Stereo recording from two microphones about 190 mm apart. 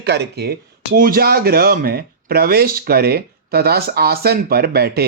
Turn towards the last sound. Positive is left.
turn(degrees=-55)  # may be behind; listen again after turning